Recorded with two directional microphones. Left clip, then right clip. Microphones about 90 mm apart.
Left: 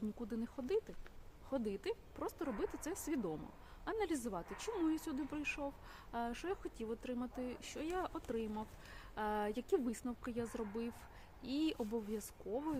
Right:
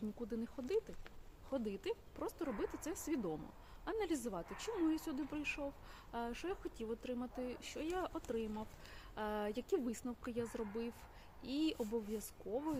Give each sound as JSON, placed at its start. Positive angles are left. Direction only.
{"t": 0.2, "sound": "a woman's voice", "side_deg": 30}